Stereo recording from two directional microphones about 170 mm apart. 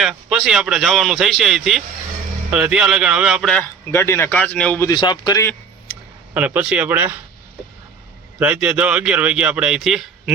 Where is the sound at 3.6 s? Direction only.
15° left (ahead or behind).